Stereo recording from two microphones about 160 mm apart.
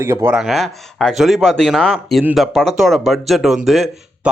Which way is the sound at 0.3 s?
Centre (ahead or behind).